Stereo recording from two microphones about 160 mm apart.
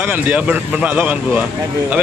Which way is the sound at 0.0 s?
10° right (ahead or behind).